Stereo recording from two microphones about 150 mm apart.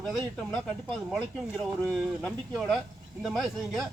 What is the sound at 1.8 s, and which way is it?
Speech, 5° left (ahead or behind).